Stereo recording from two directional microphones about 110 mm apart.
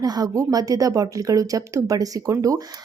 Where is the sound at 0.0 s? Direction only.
35° right (ahead or behind).